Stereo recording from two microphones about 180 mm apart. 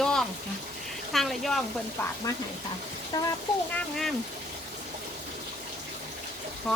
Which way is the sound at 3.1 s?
25° left (ahead or behind).